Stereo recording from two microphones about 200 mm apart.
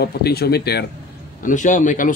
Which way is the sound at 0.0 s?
50° left (ahead or behind).